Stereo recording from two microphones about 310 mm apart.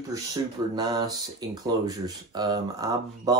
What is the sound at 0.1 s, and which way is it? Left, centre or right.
Speech, centre.